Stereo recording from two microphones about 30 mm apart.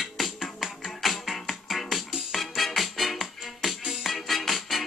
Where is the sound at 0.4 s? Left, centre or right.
Centre.